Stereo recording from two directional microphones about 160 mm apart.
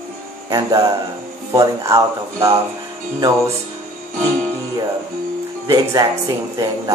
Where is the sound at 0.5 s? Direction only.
25° right (ahead or behind).